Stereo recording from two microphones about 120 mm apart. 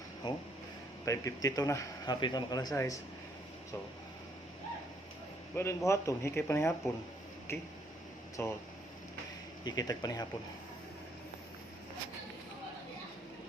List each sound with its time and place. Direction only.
0.2 s speech: 35° left (ahead or behind)
5.5 s speech: 25° left (ahead or behind)
9.6 s speech: 35° left (ahead or behind)